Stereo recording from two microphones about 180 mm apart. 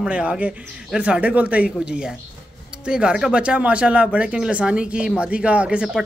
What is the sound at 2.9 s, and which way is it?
Speech, 5° right (ahead or behind).